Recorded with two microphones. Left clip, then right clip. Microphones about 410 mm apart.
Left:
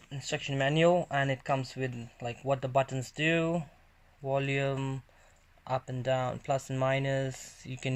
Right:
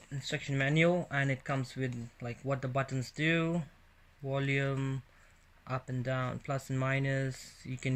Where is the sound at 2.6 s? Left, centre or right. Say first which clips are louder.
Left 8 dB; centre.